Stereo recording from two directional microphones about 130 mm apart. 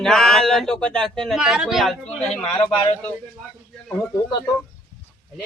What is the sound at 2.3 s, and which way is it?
Speech, 55° left (ahead or behind).